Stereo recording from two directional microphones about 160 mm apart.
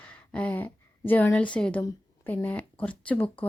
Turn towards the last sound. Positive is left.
turn(degrees=10)  # may be behind; listen again after turning